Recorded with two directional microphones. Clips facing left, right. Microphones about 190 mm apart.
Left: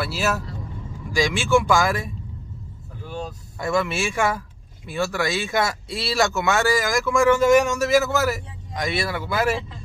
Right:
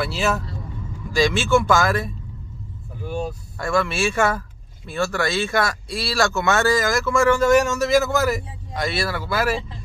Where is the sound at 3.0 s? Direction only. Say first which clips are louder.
Right 5 dB; 10° right (ahead or behind).